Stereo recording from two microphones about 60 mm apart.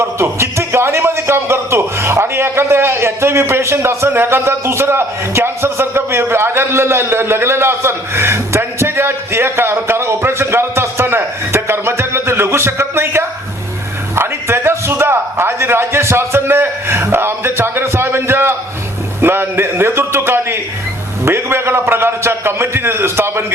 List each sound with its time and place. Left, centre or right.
0.0 s a man's voice: right